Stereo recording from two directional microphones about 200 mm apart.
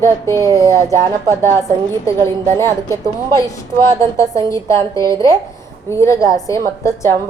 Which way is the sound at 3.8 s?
15° left (ahead or behind).